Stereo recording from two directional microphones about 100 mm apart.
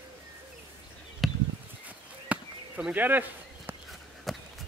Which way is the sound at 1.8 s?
15° right (ahead or behind).